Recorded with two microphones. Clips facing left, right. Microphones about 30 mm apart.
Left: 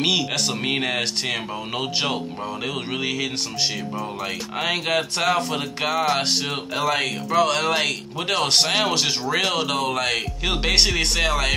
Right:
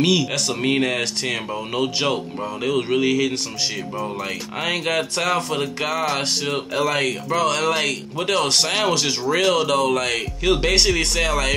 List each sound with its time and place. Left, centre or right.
0.0 s speech: centre